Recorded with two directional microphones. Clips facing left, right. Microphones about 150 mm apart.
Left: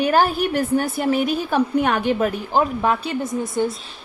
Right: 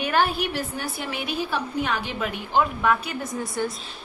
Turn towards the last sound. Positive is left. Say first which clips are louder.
# left 5 dB
turn(degrees=20)  # may be behind; listen again after turning